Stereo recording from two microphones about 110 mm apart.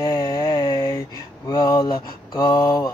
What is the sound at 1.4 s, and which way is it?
Speech, 35° left (ahead or behind).